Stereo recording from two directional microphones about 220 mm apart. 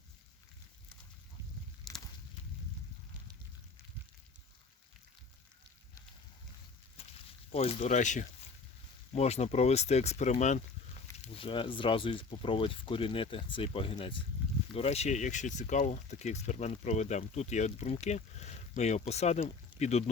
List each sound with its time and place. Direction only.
1.9 s walk: centre (ahead or behind)
7.5 s speech: 25° left (ahead or behind)